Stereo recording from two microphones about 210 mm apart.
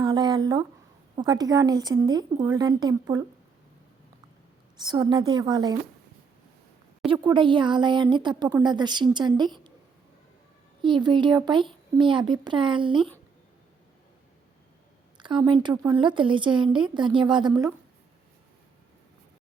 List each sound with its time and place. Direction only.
0.0 s speech: 20° right (ahead or behind)
4.8 s speech: 20° right (ahead or behind)
7.1 s speech: 20° right (ahead or behind)
10.8 s speech: 20° right (ahead or behind)
15.2 s a woman's voice: 20° right (ahead or behind)